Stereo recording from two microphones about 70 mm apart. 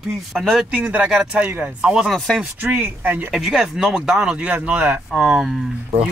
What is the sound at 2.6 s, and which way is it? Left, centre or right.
Speech, right.